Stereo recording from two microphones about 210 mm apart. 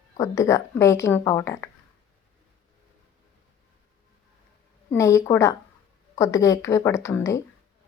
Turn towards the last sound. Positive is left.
turn(degrees=15)  # may be behind; listen again after turning